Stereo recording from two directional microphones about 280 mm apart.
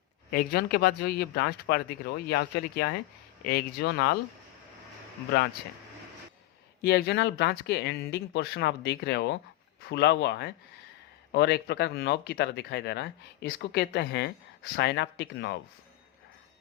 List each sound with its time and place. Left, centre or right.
0.3 s speech: left
6.8 s speech: left